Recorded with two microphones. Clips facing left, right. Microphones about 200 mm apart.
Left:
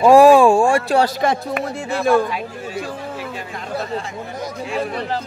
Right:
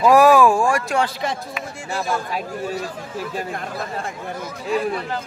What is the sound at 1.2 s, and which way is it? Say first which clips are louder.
Speech: left 7 dB; 55° left (ahead or behind).